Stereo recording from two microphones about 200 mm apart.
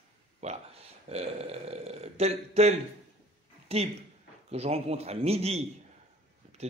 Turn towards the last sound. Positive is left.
turn(degrees=-30)  # may be behind; listen again after turning